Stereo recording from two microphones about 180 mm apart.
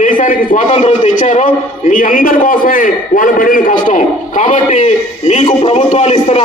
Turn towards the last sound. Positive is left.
turn(degrees=40)  # may be behind; listen again after turning